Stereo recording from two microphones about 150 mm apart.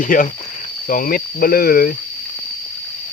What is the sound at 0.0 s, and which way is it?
Speech, 65° left (ahead or behind).